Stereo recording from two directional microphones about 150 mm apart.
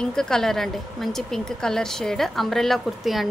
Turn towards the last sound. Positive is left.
turn(degrees=0)  # may be behind; listen again after turning